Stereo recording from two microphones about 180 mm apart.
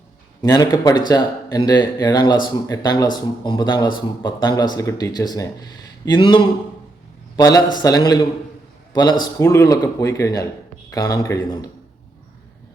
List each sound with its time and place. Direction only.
0.4 s a man's voice: 20° left (ahead or behind)